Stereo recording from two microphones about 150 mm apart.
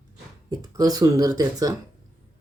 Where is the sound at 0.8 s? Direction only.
25° right (ahead or behind).